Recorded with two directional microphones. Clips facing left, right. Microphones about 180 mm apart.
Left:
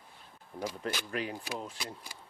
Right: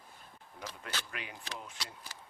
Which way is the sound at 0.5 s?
45° left (ahead or behind).